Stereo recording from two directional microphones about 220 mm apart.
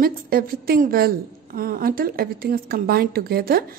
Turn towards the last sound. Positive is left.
turn(degrees=-45)  # may be behind; listen again after turning